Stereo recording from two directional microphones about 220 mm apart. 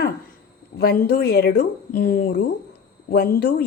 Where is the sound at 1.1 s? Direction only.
45° left (ahead or behind).